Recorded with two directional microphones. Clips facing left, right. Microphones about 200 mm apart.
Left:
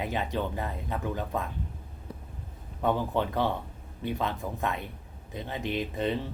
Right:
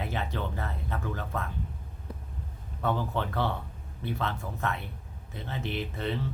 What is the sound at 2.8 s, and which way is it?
Speech, 15° left (ahead or behind).